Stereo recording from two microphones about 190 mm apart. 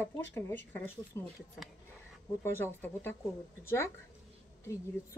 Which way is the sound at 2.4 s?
10° left (ahead or behind).